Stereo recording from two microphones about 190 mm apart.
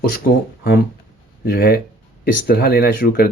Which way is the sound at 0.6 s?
50° left (ahead or behind).